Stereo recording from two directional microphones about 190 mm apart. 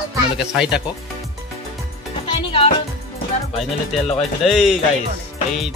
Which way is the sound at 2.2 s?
25° left (ahead or behind).